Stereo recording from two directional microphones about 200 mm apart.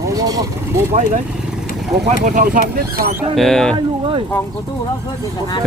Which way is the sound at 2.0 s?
40° right (ahead or behind).